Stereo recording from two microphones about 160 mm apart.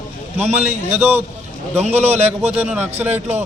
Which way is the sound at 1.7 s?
40° right (ahead or behind).